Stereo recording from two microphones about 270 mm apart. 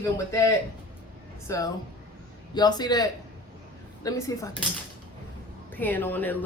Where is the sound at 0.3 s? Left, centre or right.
Centre.